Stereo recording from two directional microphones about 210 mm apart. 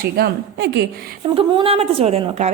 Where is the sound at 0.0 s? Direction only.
50° right (ahead or behind).